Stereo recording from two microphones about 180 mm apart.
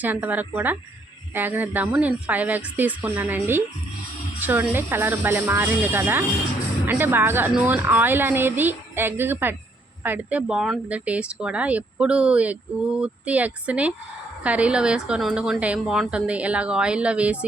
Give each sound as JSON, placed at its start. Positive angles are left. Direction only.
{"t": 0.0, "sound": "a woman's voice", "side_deg": -10}